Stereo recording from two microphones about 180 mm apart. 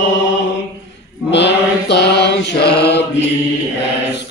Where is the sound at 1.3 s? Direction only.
75° left (ahead or behind).